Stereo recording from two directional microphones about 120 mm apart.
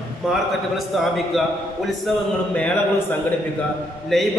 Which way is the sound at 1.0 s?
Centre (ahead or behind).